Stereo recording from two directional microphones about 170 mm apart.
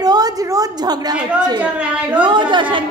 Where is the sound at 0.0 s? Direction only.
20° right (ahead or behind).